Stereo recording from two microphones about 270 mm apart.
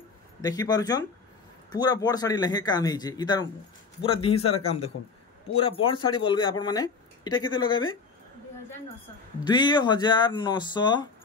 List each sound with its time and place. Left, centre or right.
0.4 s speech: centre
9.4 s speech: centre